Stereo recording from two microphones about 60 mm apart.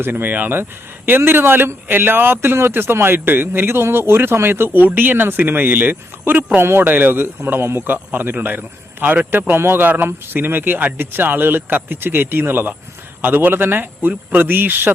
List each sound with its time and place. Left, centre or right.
0.0 s speech: right